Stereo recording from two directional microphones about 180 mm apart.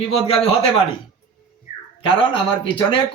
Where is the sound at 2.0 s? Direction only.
30° left (ahead or behind).